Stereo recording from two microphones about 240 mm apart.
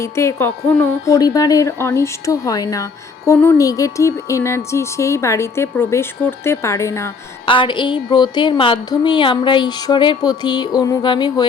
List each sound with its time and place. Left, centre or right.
0.0 s a woman's voice: centre